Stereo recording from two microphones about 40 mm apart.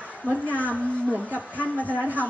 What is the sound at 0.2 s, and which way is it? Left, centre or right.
Speech, left.